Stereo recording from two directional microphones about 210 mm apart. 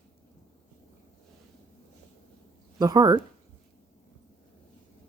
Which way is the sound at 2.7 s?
20° right (ahead or behind).